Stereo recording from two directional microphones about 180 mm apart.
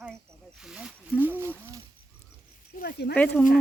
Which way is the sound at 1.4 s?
15° right (ahead or behind).